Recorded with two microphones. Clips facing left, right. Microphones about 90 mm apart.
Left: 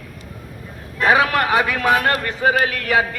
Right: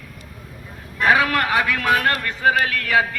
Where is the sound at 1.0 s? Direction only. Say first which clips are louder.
Left 2 dB; 20° left (ahead or behind).